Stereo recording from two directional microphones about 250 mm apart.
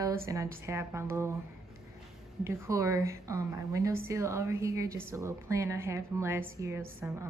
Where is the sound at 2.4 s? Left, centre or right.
Centre.